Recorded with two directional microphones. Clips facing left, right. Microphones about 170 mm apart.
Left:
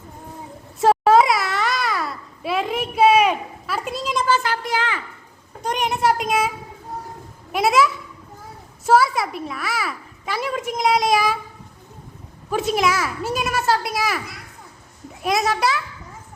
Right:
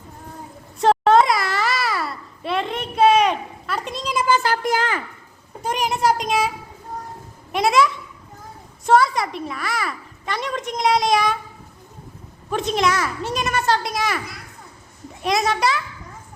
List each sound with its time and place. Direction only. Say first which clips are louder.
0.8 s babbling: even; 5° left (ahead or behind)
4.1 s speech: right 1 dB; 10° right (ahead or behind)
4.4 s a woman's voice: right 3 dB; 45° right (ahead or behind)
5.6 s a child's voice: even; centre (ahead or behind)
7.5 s a child's voice: even; 5° left (ahead or behind)
12.5 s a child's voice: even; 5° left (ahead or behind)